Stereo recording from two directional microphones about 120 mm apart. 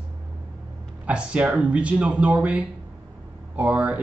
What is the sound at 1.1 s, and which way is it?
Speech, 10° right (ahead or behind).